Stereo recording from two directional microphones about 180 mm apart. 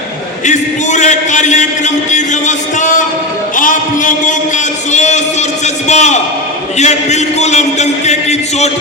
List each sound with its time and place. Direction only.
0.4 s a man's voice: 40° left (ahead or behind)